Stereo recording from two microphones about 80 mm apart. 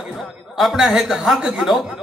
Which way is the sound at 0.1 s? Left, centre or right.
Centre.